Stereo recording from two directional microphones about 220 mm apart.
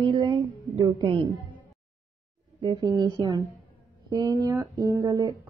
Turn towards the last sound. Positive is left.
turn(degrees=-15)  # may be behind; listen again after turning